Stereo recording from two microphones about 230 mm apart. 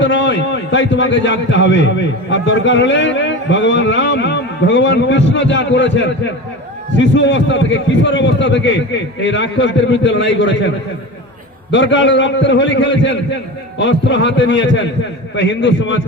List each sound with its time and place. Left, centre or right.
0.0 s a man's voice: left
11.7 s a man's voice: left